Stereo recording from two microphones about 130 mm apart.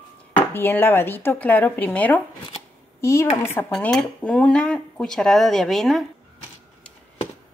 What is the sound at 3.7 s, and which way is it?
A woman's voice, 5° left (ahead or behind).